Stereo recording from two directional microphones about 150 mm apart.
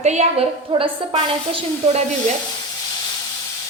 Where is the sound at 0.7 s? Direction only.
30° right (ahead or behind).